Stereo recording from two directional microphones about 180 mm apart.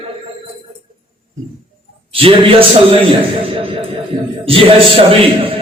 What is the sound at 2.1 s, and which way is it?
Speech, 30° right (ahead or behind).